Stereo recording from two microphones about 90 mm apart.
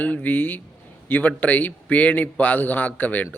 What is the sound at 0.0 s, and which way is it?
A man's voice, 15° left (ahead or behind).